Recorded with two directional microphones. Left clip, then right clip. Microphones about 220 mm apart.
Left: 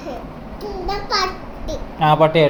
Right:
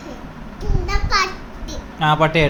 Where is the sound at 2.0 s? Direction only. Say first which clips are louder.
Left 2 dB; 15° right (ahead or behind).